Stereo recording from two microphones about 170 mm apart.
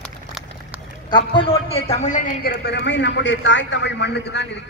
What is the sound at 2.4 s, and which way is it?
A man's voice, 70° left (ahead or behind).